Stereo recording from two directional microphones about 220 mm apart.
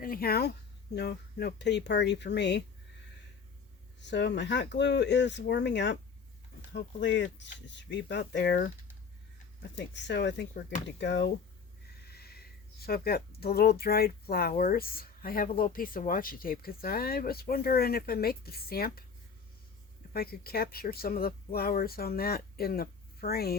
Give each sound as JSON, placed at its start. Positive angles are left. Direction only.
{"t": 0.0, "sound": "speech", "side_deg": 40}
{"t": 4.0, "sound": "speech", "side_deg": 50}
{"t": 9.7, "sound": "speech", "side_deg": 55}
{"t": 20.1, "sound": "speech", "side_deg": 45}